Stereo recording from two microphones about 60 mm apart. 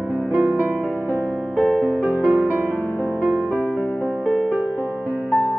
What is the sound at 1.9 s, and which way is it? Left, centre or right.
Music, right.